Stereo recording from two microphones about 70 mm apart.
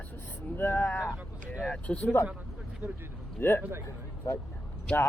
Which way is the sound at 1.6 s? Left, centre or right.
Centre.